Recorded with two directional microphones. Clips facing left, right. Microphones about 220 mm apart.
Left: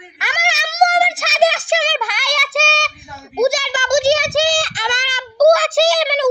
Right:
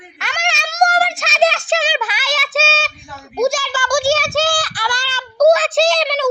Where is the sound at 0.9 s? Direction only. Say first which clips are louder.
Left 1 dB; 15° left (ahead or behind).